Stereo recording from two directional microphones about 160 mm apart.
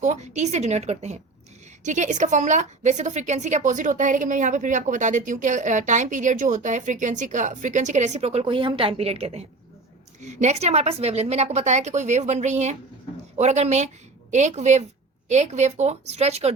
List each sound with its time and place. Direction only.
0.0 s a woman's voice: 45° right (ahead or behind)